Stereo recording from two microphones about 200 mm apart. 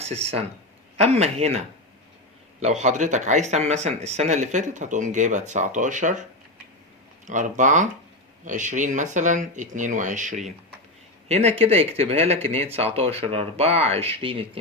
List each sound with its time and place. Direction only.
0.0 s speech: 30° right (ahead or behind)
7.3 s speech: 40° right (ahead or behind)